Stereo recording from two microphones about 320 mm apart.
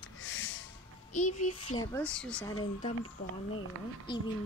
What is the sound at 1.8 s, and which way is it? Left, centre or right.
Speech, centre.